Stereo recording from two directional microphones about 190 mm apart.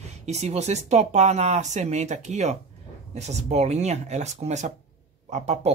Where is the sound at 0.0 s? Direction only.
35° right (ahead or behind).